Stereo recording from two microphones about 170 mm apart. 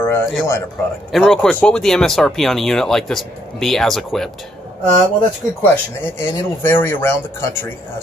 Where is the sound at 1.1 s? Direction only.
Centre (ahead or behind).